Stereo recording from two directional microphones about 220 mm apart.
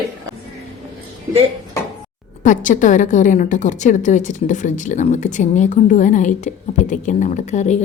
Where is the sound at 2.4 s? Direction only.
35° left (ahead or behind).